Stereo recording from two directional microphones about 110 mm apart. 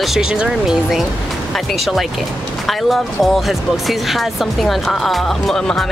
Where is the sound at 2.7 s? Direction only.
Centre (ahead or behind).